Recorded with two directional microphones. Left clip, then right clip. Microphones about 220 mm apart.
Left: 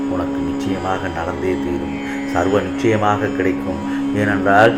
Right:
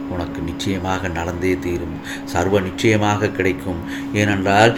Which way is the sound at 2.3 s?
50° right (ahead or behind).